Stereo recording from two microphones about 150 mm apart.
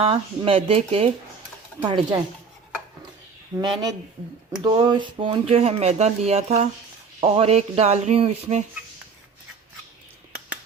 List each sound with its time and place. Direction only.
0.0 s speech: 40° right (ahead or behind)
1.8 s speech: 30° right (ahead or behind)
3.6 s speech: 30° right (ahead or behind); by 8.6 s 45° right (ahead or behind)